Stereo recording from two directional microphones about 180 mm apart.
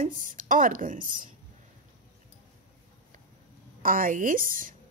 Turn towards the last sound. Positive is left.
turn(degrees=-50)  # may be behind; listen again after turning